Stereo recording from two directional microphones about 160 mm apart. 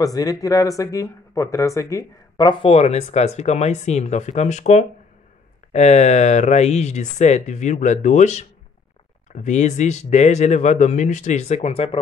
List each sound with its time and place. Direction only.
0.0 s speech: 20° left (ahead or behind)
2.6 s speech: 40° left (ahead or behind)